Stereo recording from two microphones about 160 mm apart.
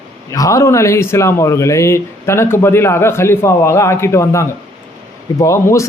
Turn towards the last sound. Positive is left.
turn(degrees=20)  # may be behind; listen again after turning